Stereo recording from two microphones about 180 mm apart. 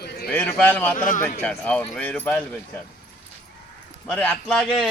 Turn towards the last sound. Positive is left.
turn(degrees=0)  # may be behind; listen again after turning